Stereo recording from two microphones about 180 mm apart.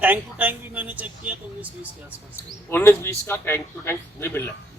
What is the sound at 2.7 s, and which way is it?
Speech, 10° left (ahead or behind).